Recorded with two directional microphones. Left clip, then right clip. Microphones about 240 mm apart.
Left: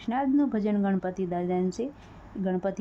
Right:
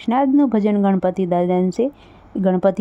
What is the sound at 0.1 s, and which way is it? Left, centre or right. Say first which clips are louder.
Speech: right 10 dB; right.